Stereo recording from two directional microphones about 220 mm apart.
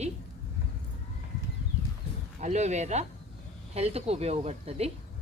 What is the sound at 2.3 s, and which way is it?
A woman's voice, 30° right (ahead or behind).